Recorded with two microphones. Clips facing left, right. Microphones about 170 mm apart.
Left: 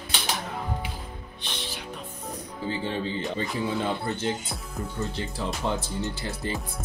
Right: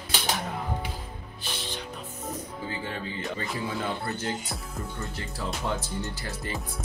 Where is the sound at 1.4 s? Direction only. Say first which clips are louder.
Right 1 dB; 5° right (ahead or behind).